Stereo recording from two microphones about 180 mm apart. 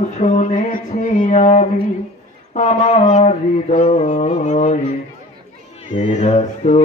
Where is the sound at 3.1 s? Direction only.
40° left (ahead or behind).